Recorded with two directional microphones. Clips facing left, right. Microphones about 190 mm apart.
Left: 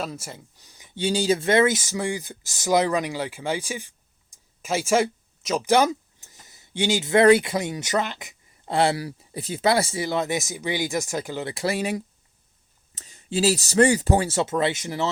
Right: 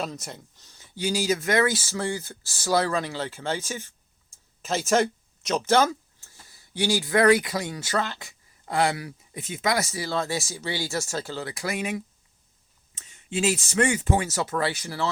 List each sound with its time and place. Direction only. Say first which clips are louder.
0.0 s speech: left 1 dB; 5° left (ahead or behind)
0.9 s speech: left 3 dB; 30° left (ahead or behind)